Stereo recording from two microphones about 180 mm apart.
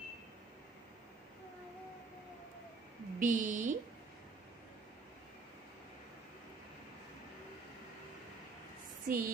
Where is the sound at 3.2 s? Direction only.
45° right (ahead or behind).